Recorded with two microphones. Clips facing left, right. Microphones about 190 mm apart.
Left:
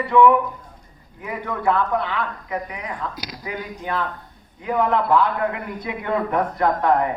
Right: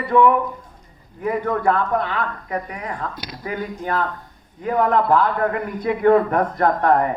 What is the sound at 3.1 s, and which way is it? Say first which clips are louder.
Speech: even; centre (ahead or behind).